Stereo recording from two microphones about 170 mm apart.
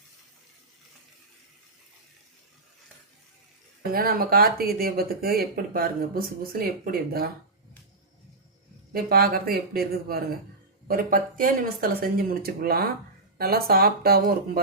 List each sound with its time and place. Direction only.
3.9 s speech: 60° right (ahead or behind)
8.9 s speech: 60° right (ahead or behind)